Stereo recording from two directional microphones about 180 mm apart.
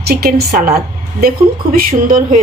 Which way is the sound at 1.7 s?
50° right (ahead or behind).